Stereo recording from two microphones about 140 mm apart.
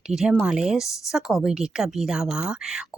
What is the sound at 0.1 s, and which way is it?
Speech, 5° right (ahead or behind).